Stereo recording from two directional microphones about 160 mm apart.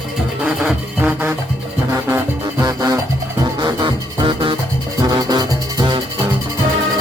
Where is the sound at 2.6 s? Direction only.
20° right (ahead or behind).